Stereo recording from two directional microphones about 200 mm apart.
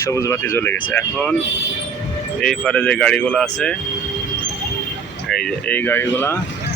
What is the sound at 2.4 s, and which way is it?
Speech, 5° left (ahead or behind).